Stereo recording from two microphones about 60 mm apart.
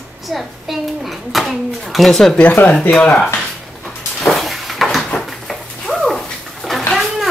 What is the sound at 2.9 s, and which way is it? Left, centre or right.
Speech, centre.